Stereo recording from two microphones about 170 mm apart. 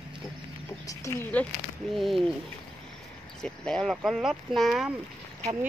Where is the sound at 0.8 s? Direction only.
15° left (ahead or behind).